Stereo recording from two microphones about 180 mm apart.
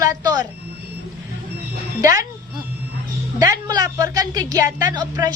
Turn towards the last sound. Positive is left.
turn(degrees=-20)  # may be behind; listen again after turning